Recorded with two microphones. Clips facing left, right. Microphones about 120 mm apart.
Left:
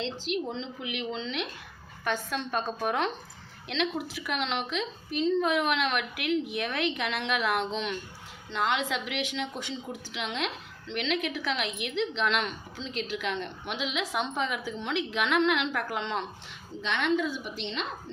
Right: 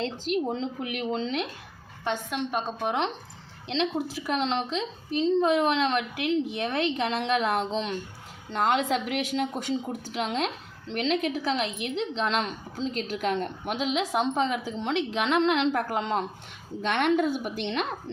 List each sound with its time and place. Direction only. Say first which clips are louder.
0.0 s speech: right 4 dB; 45° right (ahead or behind)
2.0 s a woman's voice: right 2 dB; 20° right (ahead or behind)
3.7 s a woman's voice: right 3 dB; 30° right (ahead or behind)
16.8 s a woman's voice: right 4 dB; 55° right (ahead or behind)